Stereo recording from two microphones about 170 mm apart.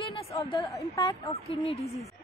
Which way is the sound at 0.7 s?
20° left (ahead or behind).